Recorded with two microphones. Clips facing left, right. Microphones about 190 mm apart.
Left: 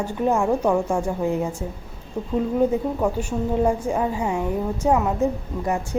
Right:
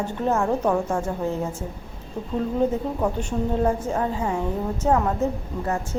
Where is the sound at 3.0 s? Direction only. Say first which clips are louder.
Left 1 dB; 10° left (ahead or behind).